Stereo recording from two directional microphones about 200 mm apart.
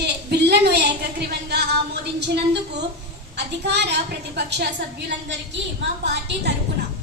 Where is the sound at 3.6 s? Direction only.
55° right (ahead or behind).